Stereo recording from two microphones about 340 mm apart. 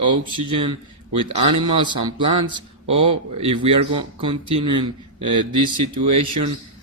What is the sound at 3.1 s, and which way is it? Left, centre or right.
Speech, right.